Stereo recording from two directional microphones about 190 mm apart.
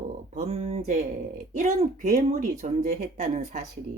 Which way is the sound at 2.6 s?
40° right (ahead or behind).